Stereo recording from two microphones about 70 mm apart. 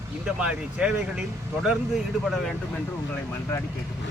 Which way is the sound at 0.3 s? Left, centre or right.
Centre.